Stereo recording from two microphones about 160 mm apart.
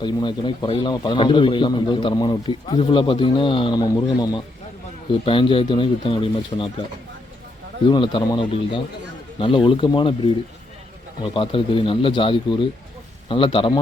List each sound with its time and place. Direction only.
0.0 s a man's voice: 30° left (ahead or behind)
5.2 s speech: 35° left (ahead or behind)
7.9 s speech: 30° left (ahead or behind)